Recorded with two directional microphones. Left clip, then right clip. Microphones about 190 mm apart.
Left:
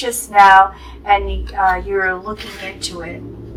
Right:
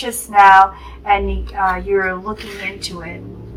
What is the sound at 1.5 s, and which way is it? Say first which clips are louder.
Speech: left 1 dB; 30° left (ahead or behind).